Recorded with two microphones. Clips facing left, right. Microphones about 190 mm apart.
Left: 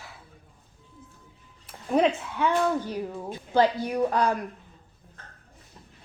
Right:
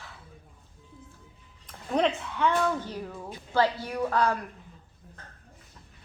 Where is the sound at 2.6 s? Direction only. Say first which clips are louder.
Left 3 dB; 15° left (ahead or behind).